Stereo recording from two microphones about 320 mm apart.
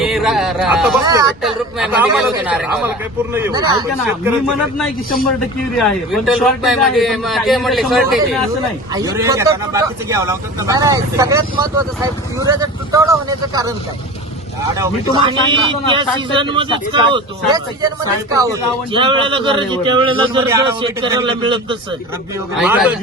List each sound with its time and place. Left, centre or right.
0.0 s a man's voice: centre
1.0 s a man's voice: centre
1.3 s a man's voice: centre
4.6 s a man's voice: centre
14.8 s a man's voice: centre
22.6 s a man's voice: centre